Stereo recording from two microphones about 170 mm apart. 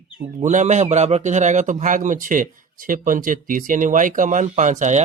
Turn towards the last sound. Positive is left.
turn(degrees=-45)  # may be behind; listen again after turning